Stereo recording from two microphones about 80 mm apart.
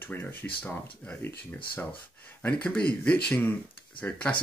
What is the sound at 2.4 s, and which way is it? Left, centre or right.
Speech, centre.